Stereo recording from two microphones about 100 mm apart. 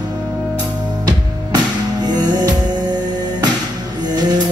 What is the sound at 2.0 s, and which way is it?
Music, 45° right (ahead or behind).